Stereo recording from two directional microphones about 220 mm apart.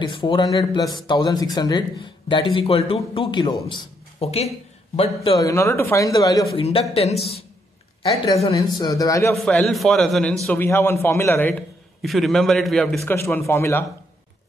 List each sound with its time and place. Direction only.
0.0 s speech: 20° left (ahead or behind)
5.5 s speech: 15° left (ahead or behind)
6.6 s speech: 25° left (ahead or behind)
8.7 s speech: 15° left (ahead or behind)
9.3 s a man's voice: centre (ahead or behind)